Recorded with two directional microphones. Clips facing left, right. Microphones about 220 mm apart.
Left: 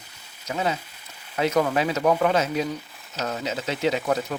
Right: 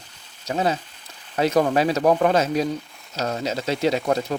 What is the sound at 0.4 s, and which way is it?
Speech, 35° right (ahead or behind).